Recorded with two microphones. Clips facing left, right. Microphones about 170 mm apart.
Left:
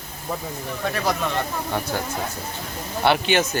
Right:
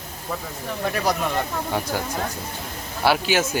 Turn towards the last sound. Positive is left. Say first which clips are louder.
# left 1 dB
turn(degrees=-5)  # may be behind; listen again after turning